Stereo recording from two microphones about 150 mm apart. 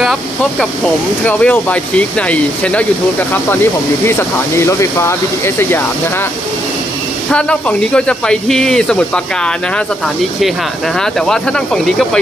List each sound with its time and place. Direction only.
0.0 s speech: 5° left (ahead or behind)
4.0 s speech: 15° left (ahead or behind)
7.2 s speech: 5° left (ahead or behind)
11.0 s speech: 5° left (ahead or behind)